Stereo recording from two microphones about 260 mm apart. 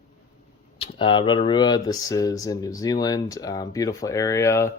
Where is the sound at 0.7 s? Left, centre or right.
Left.